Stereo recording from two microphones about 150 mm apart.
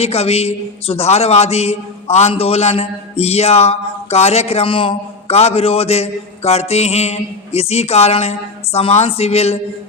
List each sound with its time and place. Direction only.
0.0 s a man's voice: 45° left (ahead or behind)